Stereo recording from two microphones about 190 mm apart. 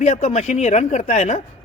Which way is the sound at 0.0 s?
35° left (ahead or behind).